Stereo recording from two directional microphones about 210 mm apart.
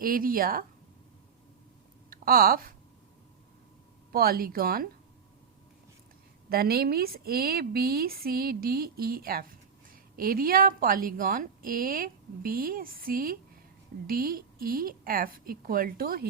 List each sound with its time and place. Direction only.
0.0 s a woman's voice: 40° right (ahead or behind)
2.0 s speech: 45° right (ahead or behind)
4.1 s a woman's voice: 45° right (ahead or behind)
6.5 s a woman's voice: 45° right (ahead or behind)